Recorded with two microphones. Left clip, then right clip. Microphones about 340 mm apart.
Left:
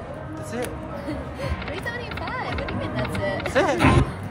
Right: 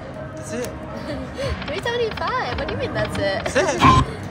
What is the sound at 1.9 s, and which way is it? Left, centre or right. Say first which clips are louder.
Speech: right 11 dB; right.